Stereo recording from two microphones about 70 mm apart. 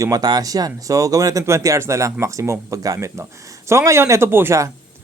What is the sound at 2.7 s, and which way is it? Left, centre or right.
Speech, right.